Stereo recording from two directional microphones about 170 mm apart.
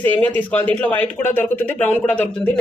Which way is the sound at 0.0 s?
10° left (ahead or behind).